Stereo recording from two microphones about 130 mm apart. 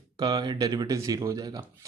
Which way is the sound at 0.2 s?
30° right (ahead or behind).